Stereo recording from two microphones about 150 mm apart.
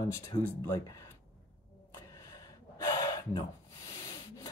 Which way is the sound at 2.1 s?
25° left (ahead or behind).